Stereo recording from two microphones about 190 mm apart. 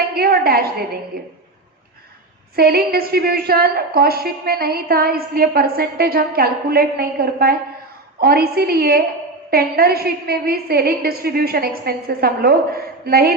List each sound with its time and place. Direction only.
0.1 s a woman's voice: 55° right (ahead or behind)
2.6 s a woman's voice: 55° right (ahead or behind)